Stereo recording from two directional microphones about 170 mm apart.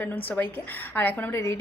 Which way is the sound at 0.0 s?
10° left (ahead or behind).